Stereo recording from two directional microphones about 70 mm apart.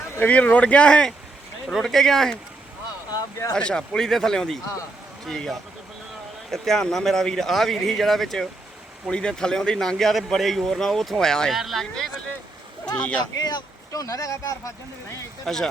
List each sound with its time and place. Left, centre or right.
0.2 s speech: centre
1.6 s a man's voice: centre
3.1 s a sound: left
3.5 s a man's voice: centre
12.8 s speech: centre
13.3 s speech: left
15.4 s a man's voice: centre